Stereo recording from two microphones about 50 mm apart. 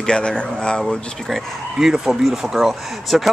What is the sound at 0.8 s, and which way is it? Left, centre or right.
Speech, centre.